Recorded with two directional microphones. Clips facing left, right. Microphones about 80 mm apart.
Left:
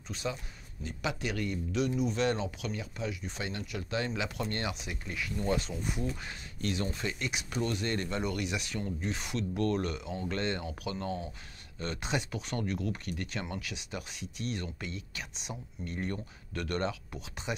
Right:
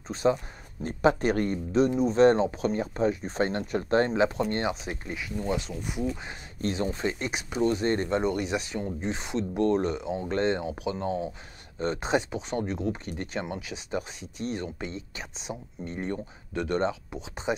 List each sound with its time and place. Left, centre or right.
0.1 s speech: right
5.1 s speech: centre
6.6 s speech: right
7.4 s speech: right
10.6 s speech: centre
11.8 s speech: right